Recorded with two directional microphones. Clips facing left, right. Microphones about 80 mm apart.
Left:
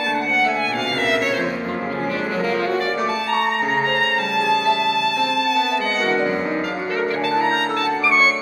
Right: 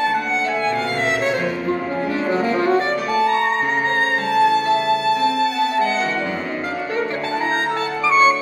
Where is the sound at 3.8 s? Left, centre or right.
Right.